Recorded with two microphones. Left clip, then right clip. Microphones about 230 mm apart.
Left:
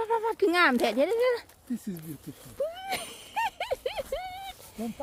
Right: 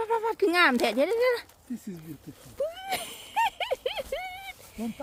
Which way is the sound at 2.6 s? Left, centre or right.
Centre.